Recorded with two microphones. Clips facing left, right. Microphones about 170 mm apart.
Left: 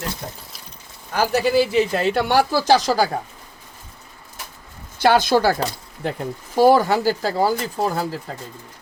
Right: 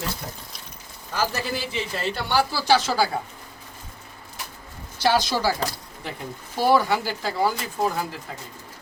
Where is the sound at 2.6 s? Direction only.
40° left (ahead or behind).